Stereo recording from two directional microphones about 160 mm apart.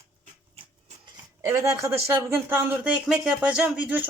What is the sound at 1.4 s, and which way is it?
Speech, 20° right (ahead or behind).